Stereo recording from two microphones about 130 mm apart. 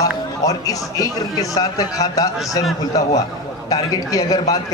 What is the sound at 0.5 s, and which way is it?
A man's voice, 25° left (ahead or behind).